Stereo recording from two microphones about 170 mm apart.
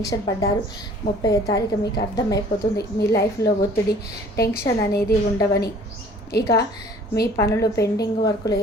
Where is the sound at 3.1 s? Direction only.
70° left (ahead or behind).